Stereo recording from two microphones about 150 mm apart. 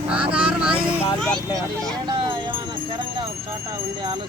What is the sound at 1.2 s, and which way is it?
Speech, 5° left (ahead or behind).